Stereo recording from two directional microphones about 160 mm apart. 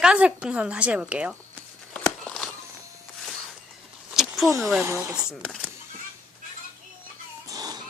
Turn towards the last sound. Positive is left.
turn(degrees=-25)  # may be behind; listen again after turning